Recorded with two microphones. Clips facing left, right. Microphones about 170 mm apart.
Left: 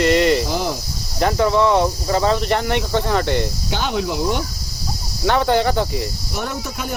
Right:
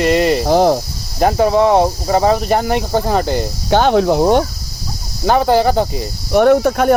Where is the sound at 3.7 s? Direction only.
50° right (ahead or behind).